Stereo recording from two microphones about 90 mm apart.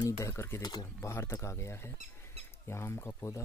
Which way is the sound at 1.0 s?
30° left (ahead or behind).